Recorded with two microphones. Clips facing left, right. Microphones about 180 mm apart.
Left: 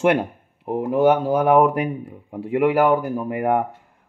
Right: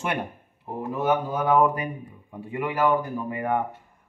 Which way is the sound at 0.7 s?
80° left.